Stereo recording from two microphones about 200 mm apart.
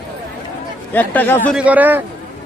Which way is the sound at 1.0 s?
10° left (ahead or behind).